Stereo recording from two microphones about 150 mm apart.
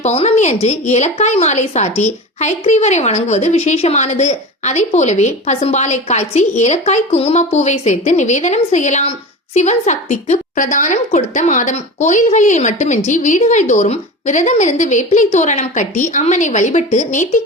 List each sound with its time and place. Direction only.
0.0 s a woman's voice: 45° left (ahead or behind)